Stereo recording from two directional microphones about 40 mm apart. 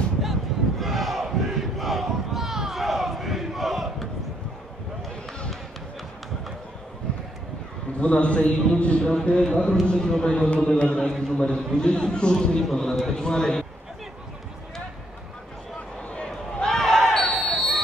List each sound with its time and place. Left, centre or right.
0.2 s battle cry: centre
2.4 s battle cry: centre
8.0 s a man's voice: left
16.3 s a sound: centre
17.3 s basketball bounce: centre